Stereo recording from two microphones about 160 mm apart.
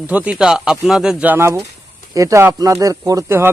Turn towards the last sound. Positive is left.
turn(degrees=-15)  # may be behind; listen again after turning